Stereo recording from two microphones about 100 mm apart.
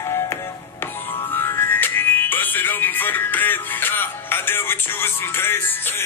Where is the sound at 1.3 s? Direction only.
25° left (ahead or behind).